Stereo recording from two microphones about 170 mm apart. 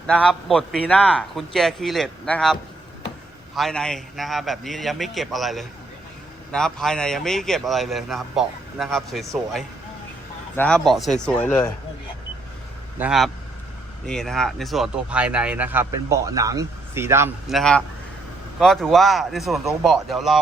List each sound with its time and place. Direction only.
0.1 s speech: 5° left (ahead or behind)
13.0 s speech: centre (ahead or behind)
17.5 s speech: 5° left (ahead or behind)